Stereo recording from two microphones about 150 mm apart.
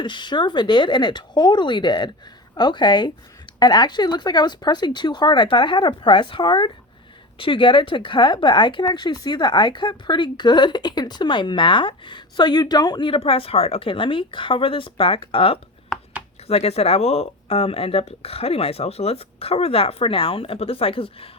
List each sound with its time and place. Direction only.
0.0 s speech: 30° left (ahead or behind)